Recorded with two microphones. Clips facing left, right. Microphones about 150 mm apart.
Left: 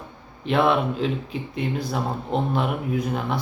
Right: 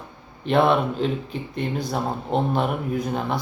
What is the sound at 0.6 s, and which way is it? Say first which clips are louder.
Speech: even; centre (ahead or behind).